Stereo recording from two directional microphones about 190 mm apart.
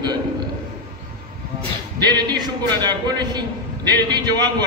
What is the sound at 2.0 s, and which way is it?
Music, 20° right (ahead or behind).